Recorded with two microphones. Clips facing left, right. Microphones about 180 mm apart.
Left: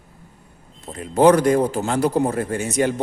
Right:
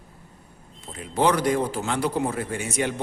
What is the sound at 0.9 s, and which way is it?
A man's voice, 45° left (ahead or behind).